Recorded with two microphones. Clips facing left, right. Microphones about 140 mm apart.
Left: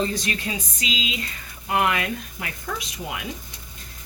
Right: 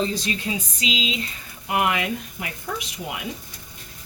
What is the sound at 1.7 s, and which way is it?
Speech, 20° right (ahead or behind).